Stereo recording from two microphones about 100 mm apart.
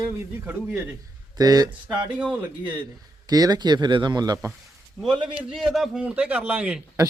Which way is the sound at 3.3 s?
40° right (ahead or behind).